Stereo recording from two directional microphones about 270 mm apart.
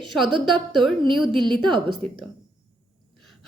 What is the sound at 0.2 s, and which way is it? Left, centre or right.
Speech, centre.